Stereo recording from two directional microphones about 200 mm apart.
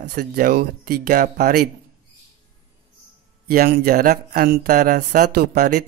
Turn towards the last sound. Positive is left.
turn(degrees=-50)  # may be behind; listen again after turning